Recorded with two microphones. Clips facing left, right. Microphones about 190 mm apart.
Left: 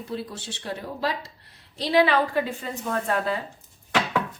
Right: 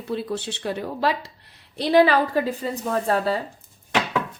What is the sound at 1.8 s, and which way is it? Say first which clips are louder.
A woman's voice: right 3 dB; 45° right (ahead or behind).